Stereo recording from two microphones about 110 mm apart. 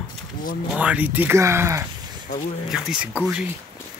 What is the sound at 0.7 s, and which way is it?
Speech, 10° right (ahead or behind).